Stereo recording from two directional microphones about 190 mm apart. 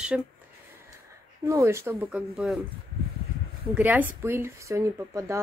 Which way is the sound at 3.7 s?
10° right (ahead or behind).